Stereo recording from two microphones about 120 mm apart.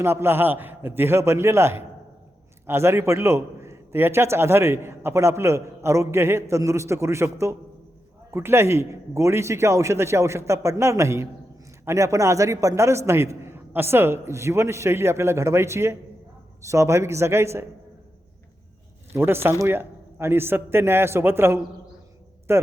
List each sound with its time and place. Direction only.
0.0 s a man's voice: 20° right (ahead or behind)
19.1 s a man's voice: 20° right (ahead or behind)